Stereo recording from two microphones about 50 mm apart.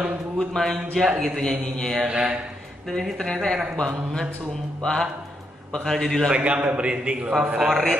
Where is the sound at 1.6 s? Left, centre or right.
Centre.